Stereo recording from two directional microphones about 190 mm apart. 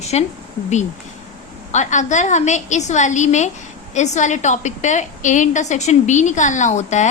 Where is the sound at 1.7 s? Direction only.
40° left (ahead or behind).